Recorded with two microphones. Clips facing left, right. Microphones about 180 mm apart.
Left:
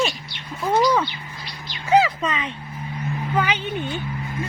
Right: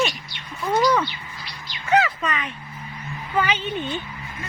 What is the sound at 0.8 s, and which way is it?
Speech, 5° left (ahead or behind).